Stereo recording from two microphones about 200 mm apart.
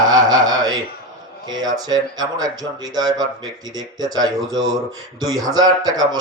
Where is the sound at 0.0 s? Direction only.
20° right (ahead or behind).